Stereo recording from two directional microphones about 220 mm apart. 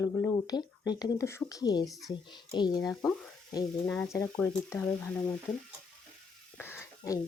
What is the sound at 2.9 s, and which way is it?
Speech, centre (ahead or behind).